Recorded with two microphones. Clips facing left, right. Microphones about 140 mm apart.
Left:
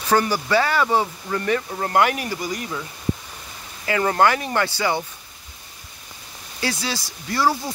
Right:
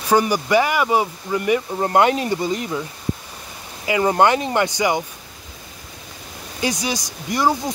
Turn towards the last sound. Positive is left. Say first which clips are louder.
# right 2 dB
turn(degrees=-20)  # may be behind; listen again after turning